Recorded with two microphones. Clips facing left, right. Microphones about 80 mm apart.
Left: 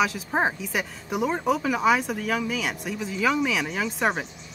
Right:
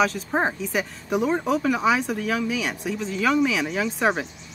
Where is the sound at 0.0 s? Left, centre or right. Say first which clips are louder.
Right 2 dB; centre.